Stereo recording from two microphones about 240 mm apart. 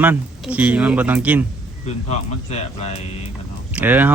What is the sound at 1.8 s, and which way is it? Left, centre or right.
Speech, left.